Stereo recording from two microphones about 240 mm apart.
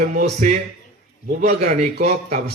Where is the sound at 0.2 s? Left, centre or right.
Right.